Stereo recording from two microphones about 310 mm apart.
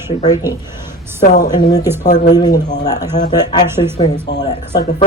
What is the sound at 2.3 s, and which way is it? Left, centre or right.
Speech, centre.